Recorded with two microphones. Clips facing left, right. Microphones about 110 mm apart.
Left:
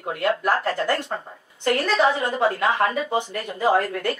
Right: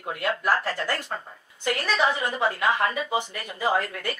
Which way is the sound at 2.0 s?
Centre (ahead or behind).